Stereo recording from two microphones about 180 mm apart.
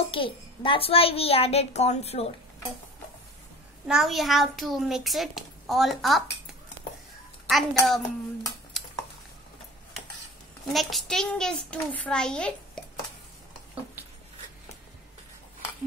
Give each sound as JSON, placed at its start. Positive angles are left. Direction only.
{"t": 0.1, "sound": "a child's voice", "side_deg": 30}
{"t": 3.8, "sound": "a child's voice", "side_deg": -5}
{"t": 7.4, "sound": "a child's voice", "side_deg": 0}
{"t": 10.7, "sound": "a child's voice", "side_deg": 0}